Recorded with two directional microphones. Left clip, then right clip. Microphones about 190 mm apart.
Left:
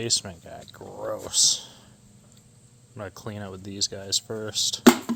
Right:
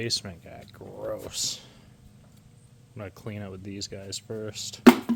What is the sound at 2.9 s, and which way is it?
Speech, 10° left (ahead or behind).